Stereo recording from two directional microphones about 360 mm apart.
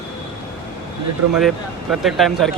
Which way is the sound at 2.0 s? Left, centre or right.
Centre.